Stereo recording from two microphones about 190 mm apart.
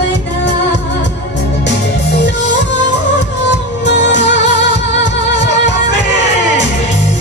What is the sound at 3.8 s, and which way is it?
Music, 70° left (ahead or behind).